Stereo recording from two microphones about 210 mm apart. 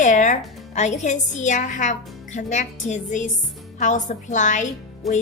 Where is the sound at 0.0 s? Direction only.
35° left (ahead or behind).